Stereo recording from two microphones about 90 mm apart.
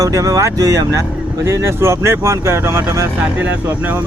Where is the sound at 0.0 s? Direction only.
40° right (ahead or behind).